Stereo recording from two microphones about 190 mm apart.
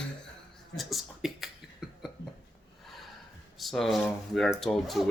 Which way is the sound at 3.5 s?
Centre (ahead or behind).